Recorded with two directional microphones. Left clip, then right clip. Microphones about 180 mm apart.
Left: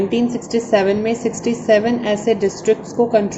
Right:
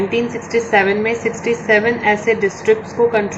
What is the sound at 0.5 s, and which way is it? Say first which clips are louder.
A woman's voice: right 2 dB; 60° left (ahead or behind).